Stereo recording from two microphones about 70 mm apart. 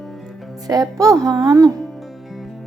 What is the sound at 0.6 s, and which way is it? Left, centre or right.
A woman's voice, right.